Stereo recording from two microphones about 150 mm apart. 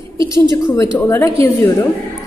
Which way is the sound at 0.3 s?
20° left (ahead or behind).